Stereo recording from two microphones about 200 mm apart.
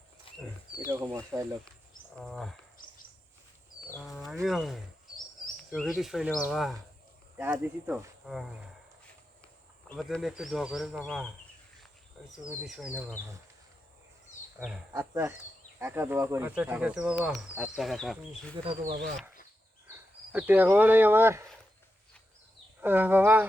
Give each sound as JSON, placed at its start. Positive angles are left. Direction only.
{"t": 0.3, "sound": "wild animals", "side_deg": 25}
{"t": 0.8, "sound": "speech", "side_deg": -15}
{"t": 2.2, "sound": "speech", "side_deg": 0}
{"t": 3.9, "sound": "speech", "side_deg": 0}
{"t": 7.3, "sound": "speech", "side_deg": -10}
{"t": 9.9, "sound": "speech", "side_deg": 0}
{"t": 12.5, "sound": "speech", "side_deg": -5}
{"t": 14.6, "sound": "speech", "side_deg": -5}
{"t": 18.5, "sound": "speech", "side_deg": -30}
{"t": 18.9, "sound": "speech", "side_deg": -45}
{"t": 20.3, "sound": "speech", "side_deg": -10}
{"t": 22.8, "sound": "speech", "side_deg": -10}